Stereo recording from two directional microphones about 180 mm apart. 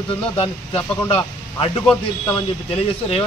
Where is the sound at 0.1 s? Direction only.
30° left (ahead or behind).